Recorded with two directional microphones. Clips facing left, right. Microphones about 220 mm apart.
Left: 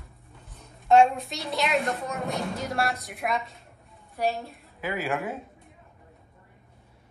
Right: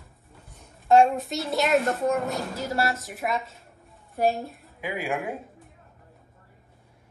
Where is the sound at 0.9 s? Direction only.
Centre (ahead or behind).